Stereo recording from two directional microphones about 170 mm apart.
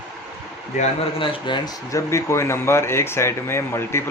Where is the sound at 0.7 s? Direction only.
40° left (ahead or behind).